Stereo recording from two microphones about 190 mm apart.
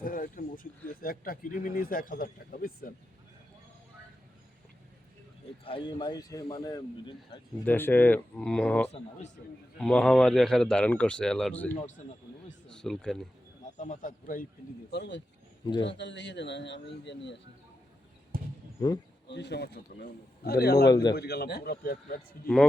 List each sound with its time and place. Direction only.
0.0 s speech: 45° left (ahead or behind)
5.6 s a man's voice: 25° left (ahead or behind); by 8.9 s 5° left (ahead or behind)
8.9 s speech: 35° left (ahead or behind)
9.7 s speech: 5° left (ahead or behind)
13.7 s a man's voice: 40° left (ahead or behind)
14.8 s a man's voice: 60° left (ahead or behind)
18.3 s a sound: 50° right (ahead or behind)
19.3 s a man's voice: 65° left (ahead or behind)
20.8 s a man's voice: 20° left (ahead or behind)
21.2 s a man's voice: 60° left (ahead or behind)